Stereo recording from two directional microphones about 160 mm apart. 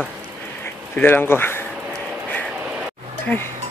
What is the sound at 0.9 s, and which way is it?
Speech, 10° left (ahead or behind).